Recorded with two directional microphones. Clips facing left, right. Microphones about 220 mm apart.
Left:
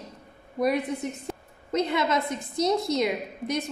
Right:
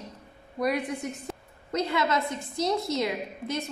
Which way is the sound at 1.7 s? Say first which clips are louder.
Left 2 dB; 20° left (ahead or behind).